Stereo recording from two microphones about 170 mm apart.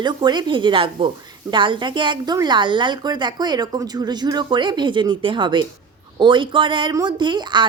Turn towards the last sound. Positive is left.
turn(degrees=-25)  # may be behind; listen again after turning